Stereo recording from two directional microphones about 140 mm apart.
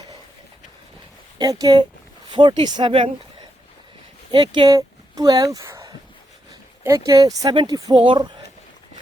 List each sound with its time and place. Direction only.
1.4 s speech: 25° right (ahead or behind)
4.3 s speech: 35° right (ahead or behind)